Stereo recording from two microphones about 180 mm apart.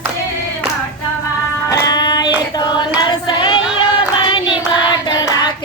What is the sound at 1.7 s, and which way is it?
Female singing, 20° left (ahead or behind).